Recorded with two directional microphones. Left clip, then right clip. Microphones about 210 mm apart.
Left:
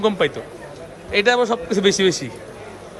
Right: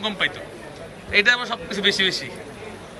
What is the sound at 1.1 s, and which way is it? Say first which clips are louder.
Speech: left 2 dB; 30° left (ahead or behind).